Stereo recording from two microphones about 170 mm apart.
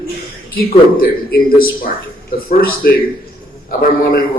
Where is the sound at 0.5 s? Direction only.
60° left (ahead or behind).